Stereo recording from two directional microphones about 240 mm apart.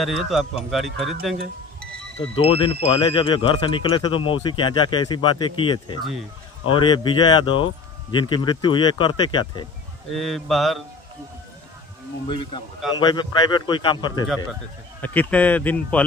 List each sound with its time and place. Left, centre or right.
0.0 s speech: centre
2.3 s speech: left
10.1 s speech: centre
12.3 s speech: left
15.0 s a man's voice: centre